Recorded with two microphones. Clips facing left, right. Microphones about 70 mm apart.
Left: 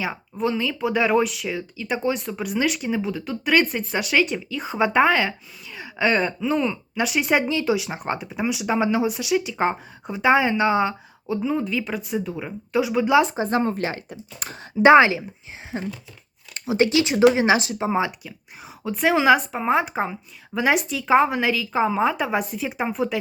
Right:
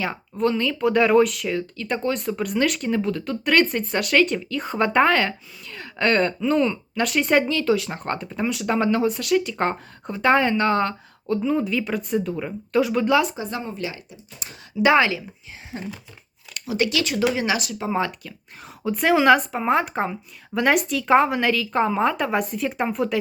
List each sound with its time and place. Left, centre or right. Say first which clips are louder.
0.0 s speech: right 2 dB; centre
13.1 s speech: left 3 dB; left
13.6 s speech: left 6 dB; left
14.8 s speech: left 5 dB; left
15.7 s speech: left 4 dB; centre
16.6 s speech: left 4 dB; left
18.8 s speech: right 1 dB; centre